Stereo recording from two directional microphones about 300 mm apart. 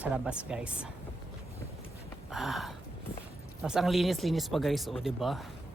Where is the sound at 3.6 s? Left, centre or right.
Centre.